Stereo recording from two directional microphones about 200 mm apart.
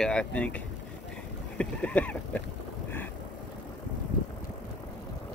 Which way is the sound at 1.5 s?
5° left (ahead or behind).